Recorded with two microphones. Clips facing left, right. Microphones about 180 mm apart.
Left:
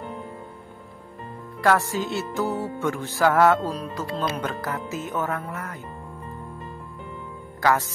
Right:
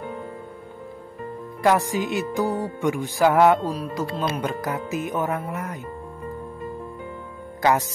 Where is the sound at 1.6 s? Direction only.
15° right (ahead or behind).